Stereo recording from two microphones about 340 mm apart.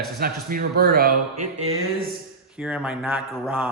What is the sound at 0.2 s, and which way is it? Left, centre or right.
Speech, right.